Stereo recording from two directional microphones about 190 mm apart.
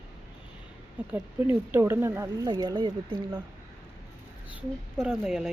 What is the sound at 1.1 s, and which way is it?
Speech, 10° right (ahead or behind).